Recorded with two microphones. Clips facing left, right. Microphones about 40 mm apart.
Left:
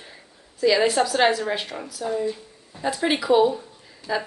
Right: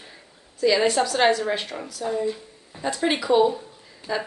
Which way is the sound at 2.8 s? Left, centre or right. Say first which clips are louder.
Left 1 dB; centre.